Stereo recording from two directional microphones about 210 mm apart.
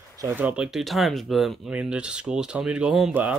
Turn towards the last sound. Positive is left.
turn(degrees=-5)  # may be behind; listen again after turning